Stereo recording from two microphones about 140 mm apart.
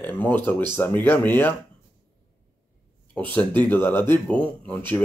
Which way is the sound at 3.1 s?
10° left (ahead or behind).